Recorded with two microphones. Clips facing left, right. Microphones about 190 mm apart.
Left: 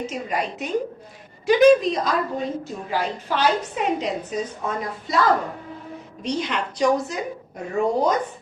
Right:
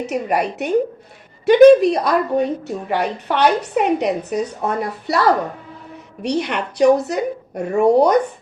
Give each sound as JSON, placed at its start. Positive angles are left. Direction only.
{"t": 0.0, "sound": "a woman's voice", "side_deg": -70}